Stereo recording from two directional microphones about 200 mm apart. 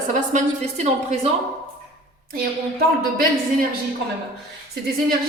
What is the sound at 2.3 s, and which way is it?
Speech, 50° right (ahead or behind).